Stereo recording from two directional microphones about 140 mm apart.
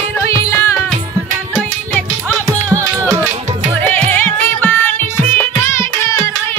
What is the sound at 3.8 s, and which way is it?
Music, 15° left (ahead or behind).